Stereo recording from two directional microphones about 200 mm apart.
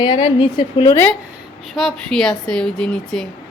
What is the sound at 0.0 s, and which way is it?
Speech, 25° left (ahead or behind).